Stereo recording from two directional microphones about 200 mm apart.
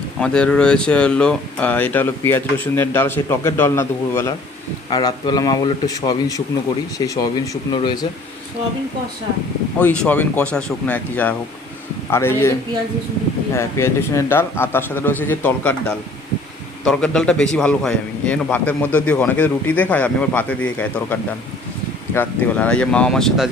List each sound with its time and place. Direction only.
0.2 s a man's voice: 5° left (ahead or behind); by 7.9 s 20° left (ahead or behind)
9.7 s a man's voice: 5° left (ahead or behind)